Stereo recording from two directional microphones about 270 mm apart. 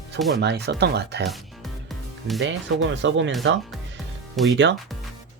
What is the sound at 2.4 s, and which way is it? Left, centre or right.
Speech, right.